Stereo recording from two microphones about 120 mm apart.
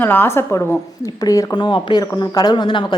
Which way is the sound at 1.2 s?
30° left (ahead or behind).